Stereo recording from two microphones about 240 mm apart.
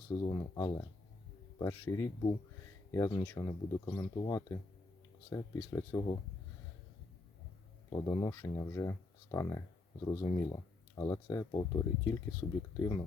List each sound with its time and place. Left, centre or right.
0.1 s speech: centre
7.9 s speech: centre